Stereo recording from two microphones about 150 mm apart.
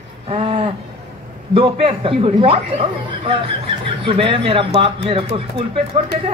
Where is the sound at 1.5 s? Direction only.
40° right (ahead or behind).